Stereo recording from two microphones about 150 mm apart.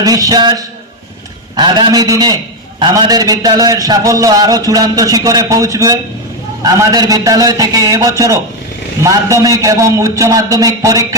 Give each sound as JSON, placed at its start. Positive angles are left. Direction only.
{"t": 0.0, "sound": "a man's voice", "side_deg": -25}